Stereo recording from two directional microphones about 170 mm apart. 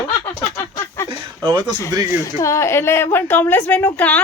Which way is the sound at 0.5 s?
15° left (ahead or behind).